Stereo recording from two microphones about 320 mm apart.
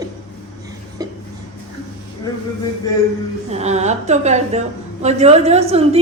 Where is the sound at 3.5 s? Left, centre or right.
Right.